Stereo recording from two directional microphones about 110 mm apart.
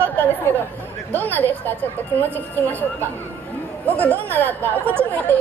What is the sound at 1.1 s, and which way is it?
Speech, 15° left (ahead or behind).